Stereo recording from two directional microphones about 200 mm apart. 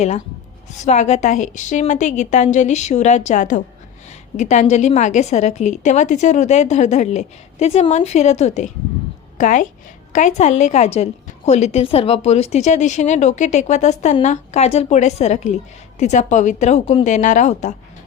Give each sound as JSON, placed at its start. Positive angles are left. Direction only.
{"t": 0.8, "sound": "a woman's voice", "side_deg": 35}